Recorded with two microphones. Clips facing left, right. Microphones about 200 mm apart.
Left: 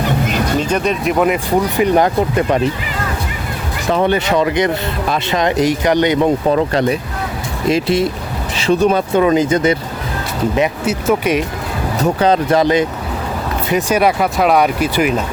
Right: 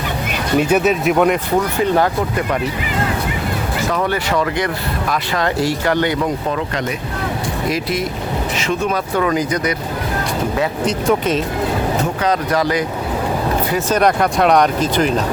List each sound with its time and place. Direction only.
0.6 s speech: 5° right (ahead or behind)
1.7 s speech: 15° left (ahead or behind)
3.9 s speech: 25° left (ahead or behind)
6.2 s speech: 30° left (ahead or behind)
10.8 s speech: 5° left (ahead or behind)
12.2 s speech: 25° left (ahead or behind)
14.0 s speech: 5° left (ahead or behind)